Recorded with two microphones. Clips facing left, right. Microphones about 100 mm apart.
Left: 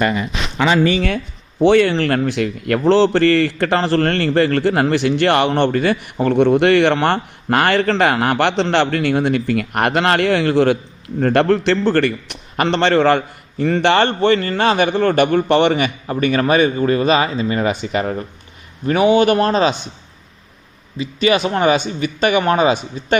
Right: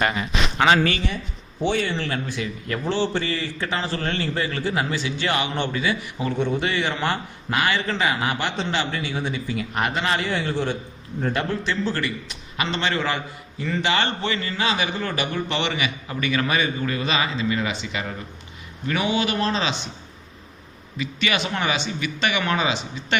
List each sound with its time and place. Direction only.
1.6 s a man's voice: 80° left
11.2 s a man's voice: 70° left (ahead or behind); by 19.7 s 45° left (ahead or behind)
21.0 s speech: 35° left (ahead or behind)